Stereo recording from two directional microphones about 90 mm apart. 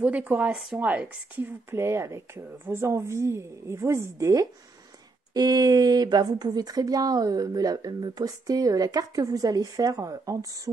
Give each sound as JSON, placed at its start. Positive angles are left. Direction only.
{"t": 0.0, "sound": "speech", "side_deg": -15}
{"t": 5.3, "sound": "speech", "side_deg": -45}